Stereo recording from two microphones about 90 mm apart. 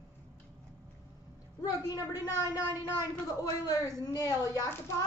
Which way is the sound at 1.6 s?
40° left (ahead or behind).